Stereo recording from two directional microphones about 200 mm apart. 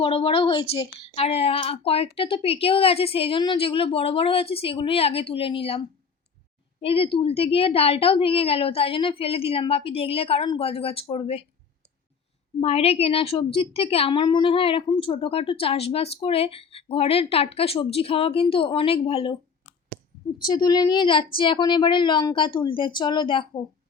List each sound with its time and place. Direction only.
0.0 s a woman's voice: 30° left (ahead or behind)
6.8 s a woman's voice: 30° left (ahead or behind)
12.5 s a woman's voice: 30° left (ahead or behind)
20.5 s a woman's voice: 20° left (ahead or behind)